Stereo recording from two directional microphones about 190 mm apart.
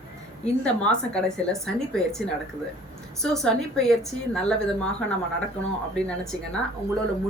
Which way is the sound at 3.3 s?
Centre (ahead or behind).